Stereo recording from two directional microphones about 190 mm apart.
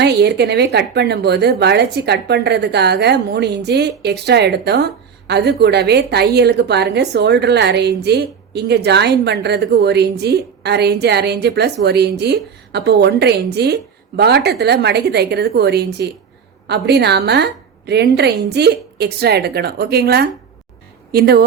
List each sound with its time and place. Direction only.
0.0 s speech: 60° right (ahead or behind)